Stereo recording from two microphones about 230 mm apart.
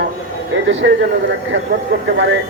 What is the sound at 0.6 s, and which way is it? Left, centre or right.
Speech, right.